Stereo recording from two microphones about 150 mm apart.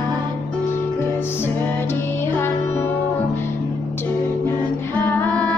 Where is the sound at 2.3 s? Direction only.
10° left (ahead or behind).